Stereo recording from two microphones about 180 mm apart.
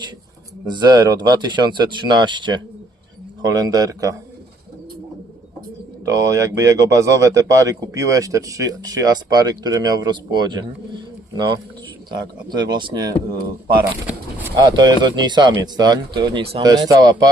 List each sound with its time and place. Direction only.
0.6 s speech: 25° right (ahead or behind)
6.1 s speech: 20° right (ahead or behind)
13.8 s a sound: 10° right (ahead or behind)
14.5 s speech: 25° right (ahead or behind)
16.6 s speech: 20° right (ahead or behind)